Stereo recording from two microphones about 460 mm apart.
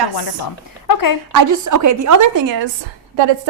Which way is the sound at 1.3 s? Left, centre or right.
Right.